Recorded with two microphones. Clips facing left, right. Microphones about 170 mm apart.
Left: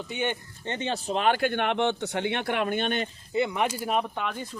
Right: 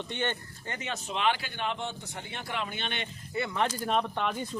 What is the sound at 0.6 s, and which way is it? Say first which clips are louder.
Speech: left 9 dB; 25° left (ahead or behind).